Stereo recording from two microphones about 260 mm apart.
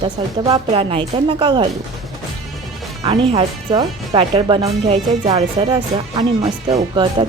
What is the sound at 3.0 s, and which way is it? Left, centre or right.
Speech, centre.